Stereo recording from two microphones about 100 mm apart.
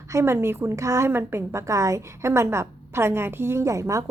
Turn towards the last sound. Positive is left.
turn(degrees=-35)  # may be behind; listen again after turning